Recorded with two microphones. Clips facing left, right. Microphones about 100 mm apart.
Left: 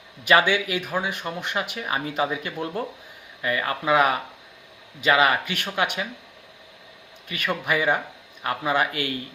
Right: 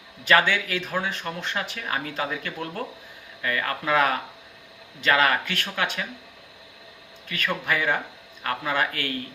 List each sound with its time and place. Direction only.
0.3 s speech: 15° left (ahead or behind)
7.3 s speech: 15° left (ahead or behind)